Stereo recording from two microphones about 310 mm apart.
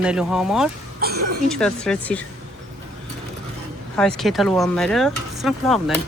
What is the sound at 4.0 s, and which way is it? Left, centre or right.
Speech, centre.